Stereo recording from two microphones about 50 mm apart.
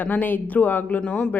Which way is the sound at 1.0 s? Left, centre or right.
Left.